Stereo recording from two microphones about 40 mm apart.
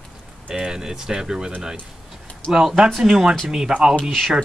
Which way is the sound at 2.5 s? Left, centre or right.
Centre.